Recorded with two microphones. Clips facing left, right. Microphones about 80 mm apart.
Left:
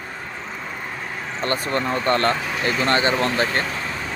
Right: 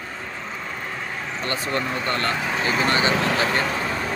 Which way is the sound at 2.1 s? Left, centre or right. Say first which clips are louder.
Left 7 dB; left.